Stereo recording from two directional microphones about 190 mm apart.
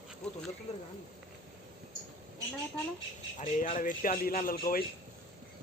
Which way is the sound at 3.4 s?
40° left (ahead or behind).